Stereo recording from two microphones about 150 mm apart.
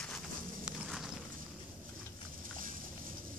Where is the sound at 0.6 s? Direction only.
Centre (ahead or behind).